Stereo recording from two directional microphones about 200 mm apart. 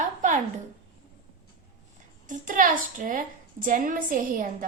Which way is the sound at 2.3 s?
40° right (ahead or behind).